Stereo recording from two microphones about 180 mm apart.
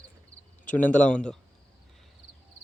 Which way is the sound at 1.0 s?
5° left (ahead or behind).